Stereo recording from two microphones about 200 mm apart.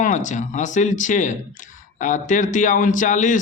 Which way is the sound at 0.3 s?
35° left (ahead or behind).